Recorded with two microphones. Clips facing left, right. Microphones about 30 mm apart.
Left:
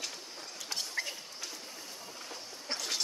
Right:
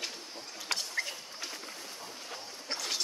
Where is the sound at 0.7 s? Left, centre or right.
Right.